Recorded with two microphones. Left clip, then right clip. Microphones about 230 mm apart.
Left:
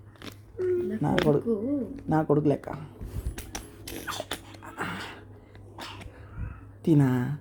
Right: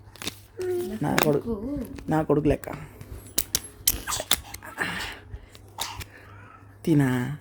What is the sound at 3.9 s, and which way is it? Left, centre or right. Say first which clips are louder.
Dog: right 3 dB; right.